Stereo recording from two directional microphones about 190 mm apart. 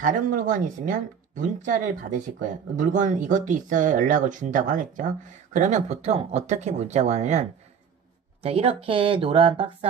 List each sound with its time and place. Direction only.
0.0 s speech: 45° right (ahead or behind)